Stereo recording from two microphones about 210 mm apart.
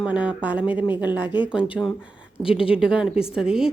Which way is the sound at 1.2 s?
20° left (ahead or behind).